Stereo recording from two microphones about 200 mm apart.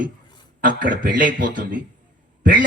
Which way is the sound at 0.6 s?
45° right (ahead or behind).